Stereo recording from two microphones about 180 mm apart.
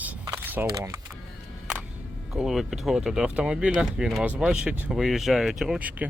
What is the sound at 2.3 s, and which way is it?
Speech, 5° right (ahead or behind).